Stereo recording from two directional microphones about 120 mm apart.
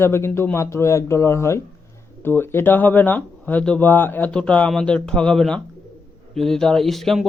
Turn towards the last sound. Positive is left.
turn(degrees=0)  # may be behind; listen again after turning